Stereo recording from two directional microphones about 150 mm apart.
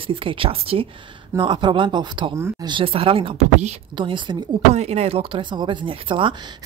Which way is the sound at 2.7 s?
35° right (ahead or behind).